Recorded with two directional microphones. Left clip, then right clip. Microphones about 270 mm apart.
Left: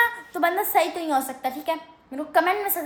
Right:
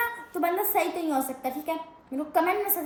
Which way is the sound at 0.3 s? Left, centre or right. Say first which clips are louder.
Left 4 dB; centre.